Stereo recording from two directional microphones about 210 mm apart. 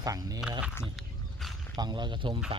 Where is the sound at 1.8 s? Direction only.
20° right (ahead or behind).